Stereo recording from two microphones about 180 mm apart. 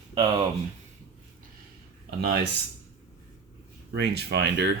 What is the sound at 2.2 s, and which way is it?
Speech, 65° right (ahead or behind).